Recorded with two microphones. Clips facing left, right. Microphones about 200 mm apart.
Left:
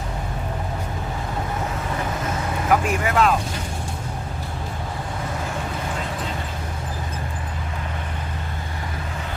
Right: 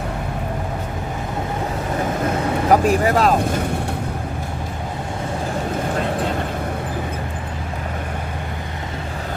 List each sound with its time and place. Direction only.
2.6 s speech: 35° right (ahead or behind)